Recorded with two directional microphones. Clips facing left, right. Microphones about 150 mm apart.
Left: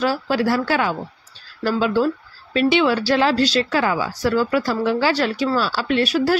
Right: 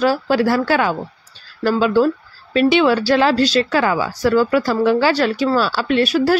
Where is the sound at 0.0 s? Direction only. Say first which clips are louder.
Right 4 dB; 50° right (ahead or behind).